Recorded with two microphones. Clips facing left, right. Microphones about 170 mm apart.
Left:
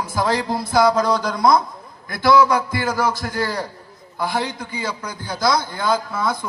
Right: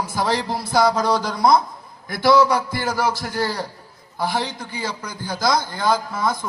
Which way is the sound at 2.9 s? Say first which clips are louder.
Even; 50° left (ahead or behind).